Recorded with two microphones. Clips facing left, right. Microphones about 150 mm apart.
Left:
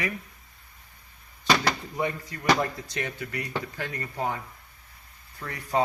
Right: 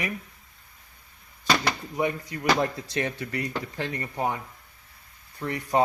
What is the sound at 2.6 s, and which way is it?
Speech, 30° right (ahead or behind).